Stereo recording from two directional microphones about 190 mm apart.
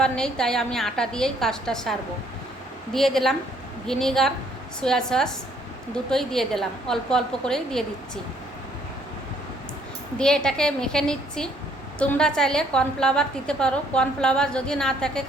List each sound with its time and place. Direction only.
0.0 s a woman's voice: 5° left (ahead or behind)
10.2 s a woman's voice: 5° left (ahead or behind)